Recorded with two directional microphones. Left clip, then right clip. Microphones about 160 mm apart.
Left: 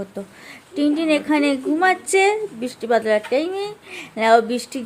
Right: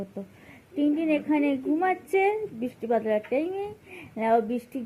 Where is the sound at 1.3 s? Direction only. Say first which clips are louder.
Left 6 dB; 30° left (ahead or behind).